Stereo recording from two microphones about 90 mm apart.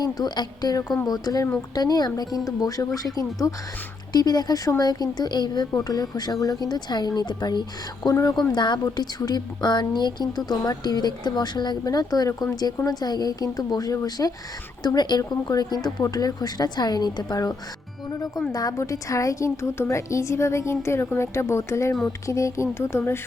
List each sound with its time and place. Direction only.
0.0 s a woman's voice: 50° left (ahead or behind)
8.5 s speech: 55° left (ahead or behind)
8.8 s a woman's voice: 45° left (ahead or behind)
14.8 s a woman's voice: 50° left (ahead or behind)
18.5 s a woman's voice: 40° left (ahead or behind)